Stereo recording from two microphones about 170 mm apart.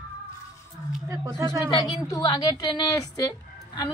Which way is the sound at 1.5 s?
25° left (ahead or behind).